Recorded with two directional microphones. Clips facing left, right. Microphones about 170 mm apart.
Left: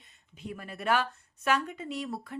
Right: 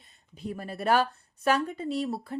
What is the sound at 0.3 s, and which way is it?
Speech, 35° right (ahead or behind).